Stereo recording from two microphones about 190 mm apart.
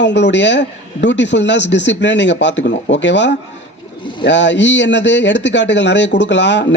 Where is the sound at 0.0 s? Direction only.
70° left (ahead or behind).